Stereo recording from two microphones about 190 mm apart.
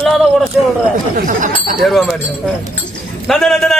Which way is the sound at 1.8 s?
Centre (ahead or behind).